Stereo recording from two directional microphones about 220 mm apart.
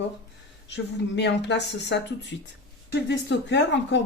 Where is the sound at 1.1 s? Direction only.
55° left (ahead or behind).